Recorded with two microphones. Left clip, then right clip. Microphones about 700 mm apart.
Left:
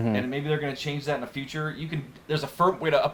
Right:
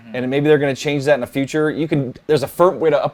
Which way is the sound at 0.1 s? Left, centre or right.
Right.